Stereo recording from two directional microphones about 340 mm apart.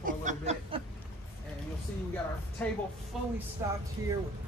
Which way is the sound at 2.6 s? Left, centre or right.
Centre.